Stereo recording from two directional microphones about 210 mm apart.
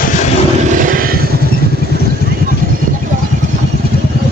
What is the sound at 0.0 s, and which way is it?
Vehicle, 40° left (ahead or behind).